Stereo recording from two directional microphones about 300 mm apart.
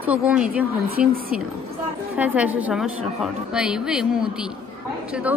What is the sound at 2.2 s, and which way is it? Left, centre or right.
A woman's voice, centre.